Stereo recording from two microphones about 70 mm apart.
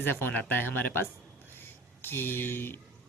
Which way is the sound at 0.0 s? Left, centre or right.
Left.